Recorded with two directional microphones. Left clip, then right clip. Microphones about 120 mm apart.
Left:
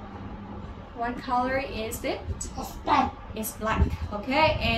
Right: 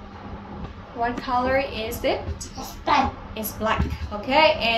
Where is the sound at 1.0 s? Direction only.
30° left (ahead or behind).